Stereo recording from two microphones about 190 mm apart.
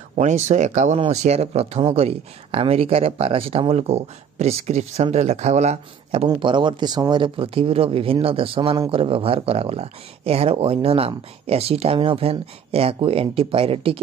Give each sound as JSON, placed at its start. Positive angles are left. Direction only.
{"t": 0.1, "sound": "speech", "side_deg": -35}
{"t": 6.2, "sound": "speech", "side_deg": -25}